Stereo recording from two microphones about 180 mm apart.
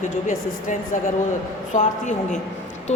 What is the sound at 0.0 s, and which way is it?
A woman's voice, 45° left (ahead or behind).